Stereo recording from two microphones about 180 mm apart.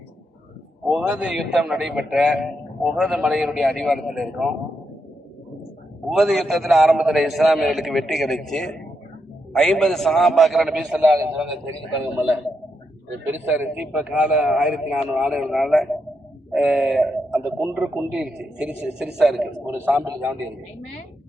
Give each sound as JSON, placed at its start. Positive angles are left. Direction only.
{"t": 0.9, "sound": "a man's voice", "side_deg": -5}
{"t": 6.1, "sound": "a man's voice", "side_deg": 0}